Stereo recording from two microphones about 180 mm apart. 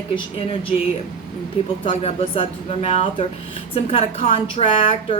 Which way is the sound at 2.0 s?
30° left (ahead or behind).